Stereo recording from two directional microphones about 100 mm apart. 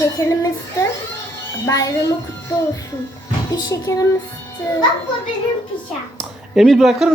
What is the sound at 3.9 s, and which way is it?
Music, 30° left (ahead or behind).